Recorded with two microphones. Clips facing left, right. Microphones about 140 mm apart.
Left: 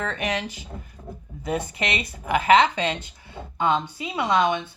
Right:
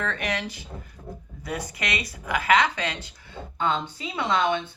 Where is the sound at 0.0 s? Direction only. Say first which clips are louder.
Left 2 dB; 20° left (ahead or behind).